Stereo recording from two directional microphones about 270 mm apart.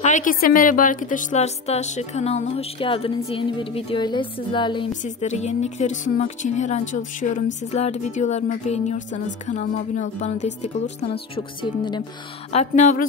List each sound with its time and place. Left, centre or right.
0.0 s a woman's voice: left